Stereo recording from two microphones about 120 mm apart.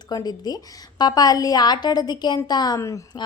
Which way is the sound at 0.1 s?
35° left (ahead or behind).